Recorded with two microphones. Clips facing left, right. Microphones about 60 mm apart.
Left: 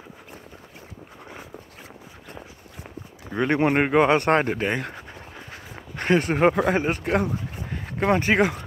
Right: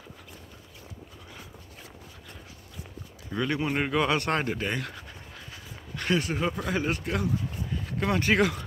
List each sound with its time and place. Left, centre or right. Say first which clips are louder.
3.3 s speech: left 7 dB; left
5.5 s a sound: left 3 dB; left
6.8 s speech: left 6 dB; left